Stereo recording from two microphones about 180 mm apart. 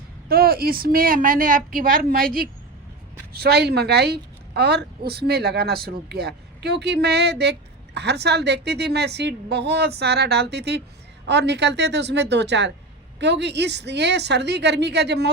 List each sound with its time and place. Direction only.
0.3 s a woman's voice: 55° right (ahead or behind)